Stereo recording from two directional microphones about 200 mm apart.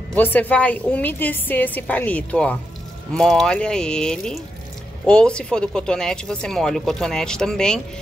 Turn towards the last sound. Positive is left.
turn(degrees=5)  # may be behind; listen again after turning